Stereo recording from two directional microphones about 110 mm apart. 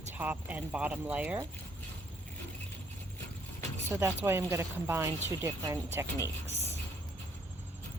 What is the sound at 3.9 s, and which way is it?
Speech, 20° right (ahead or behind).